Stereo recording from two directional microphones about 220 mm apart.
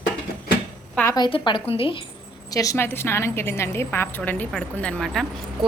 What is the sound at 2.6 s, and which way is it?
A woman's voice, 15° left (ahead or behind).